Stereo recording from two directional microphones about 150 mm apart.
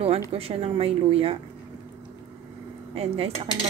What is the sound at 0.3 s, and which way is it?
A woman's voice, 40° right (ahead or behind).